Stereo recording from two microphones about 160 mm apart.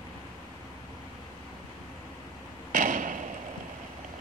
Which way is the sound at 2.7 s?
55° right (ahead or behind).